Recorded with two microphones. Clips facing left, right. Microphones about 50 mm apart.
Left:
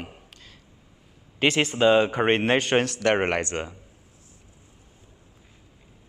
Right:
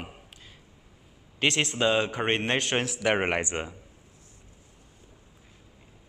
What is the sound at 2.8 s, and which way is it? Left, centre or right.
Speech, centre.